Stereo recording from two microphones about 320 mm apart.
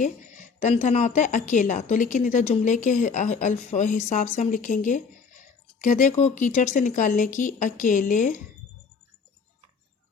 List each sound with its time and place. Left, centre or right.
0.0 s a woman's voice: left